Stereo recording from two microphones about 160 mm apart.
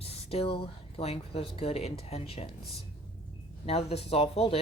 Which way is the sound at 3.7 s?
40° left (ahead or behind).